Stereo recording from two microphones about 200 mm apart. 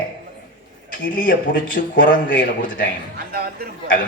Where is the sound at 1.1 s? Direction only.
45° left (ahead or behind).